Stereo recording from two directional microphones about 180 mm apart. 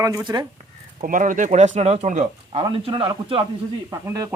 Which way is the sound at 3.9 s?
15° right (ahead or behind).